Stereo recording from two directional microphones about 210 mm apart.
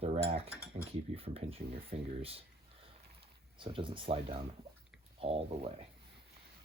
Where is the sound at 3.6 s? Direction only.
25° right (ahead or behind).